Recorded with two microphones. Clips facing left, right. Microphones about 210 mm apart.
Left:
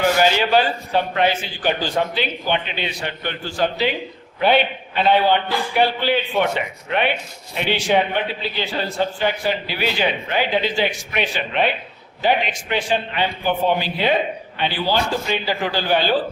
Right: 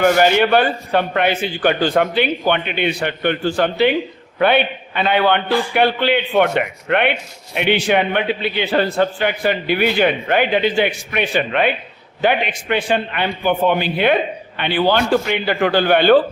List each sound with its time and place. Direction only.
0.0 s a man's voice: 55° right (ahead or behind)